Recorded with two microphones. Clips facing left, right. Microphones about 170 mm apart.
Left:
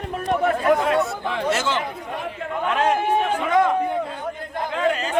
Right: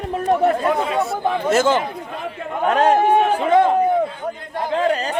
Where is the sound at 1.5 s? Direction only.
45° right (ahead or behind).